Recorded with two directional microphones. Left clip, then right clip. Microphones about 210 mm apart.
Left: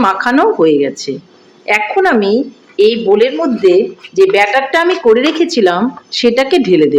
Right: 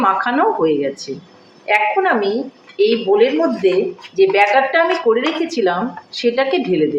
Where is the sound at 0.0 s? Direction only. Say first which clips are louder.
Left 4 dB; 55° left (ahead or behind).